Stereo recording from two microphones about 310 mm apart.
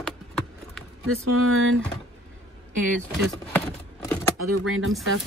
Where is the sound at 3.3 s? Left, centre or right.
Centre.